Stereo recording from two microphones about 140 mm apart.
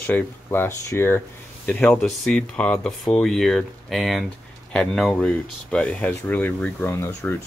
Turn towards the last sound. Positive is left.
turn(degrees=15)  # may be behind; listen again after turning